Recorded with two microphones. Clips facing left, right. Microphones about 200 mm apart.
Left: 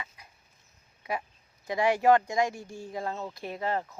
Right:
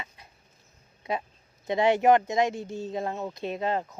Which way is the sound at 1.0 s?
25° right (ahead or behind).